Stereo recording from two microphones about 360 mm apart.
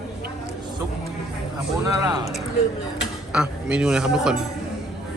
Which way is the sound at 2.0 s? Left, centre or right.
Centre.